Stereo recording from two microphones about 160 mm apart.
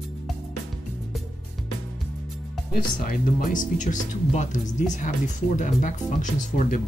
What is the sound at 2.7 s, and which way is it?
Speech, 60° left (ahead or behind).